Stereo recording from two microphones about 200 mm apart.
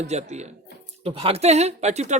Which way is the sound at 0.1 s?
35° right (ahead or behind).